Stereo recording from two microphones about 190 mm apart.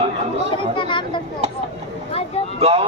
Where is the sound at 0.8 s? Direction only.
25° left (ahead or behind).